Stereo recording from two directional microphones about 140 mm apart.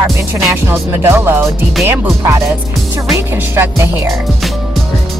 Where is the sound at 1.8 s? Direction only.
20° right (ahead or behind).